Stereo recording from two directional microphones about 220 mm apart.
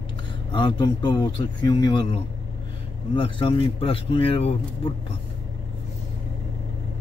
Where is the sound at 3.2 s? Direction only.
25° left (ahead or behind).